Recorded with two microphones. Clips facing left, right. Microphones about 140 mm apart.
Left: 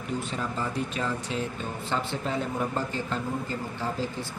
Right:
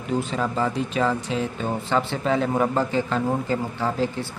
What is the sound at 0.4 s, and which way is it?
A man's voice, 90° right.